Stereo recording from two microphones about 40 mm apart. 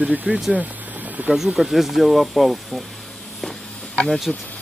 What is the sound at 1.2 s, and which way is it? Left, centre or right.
Speech, right.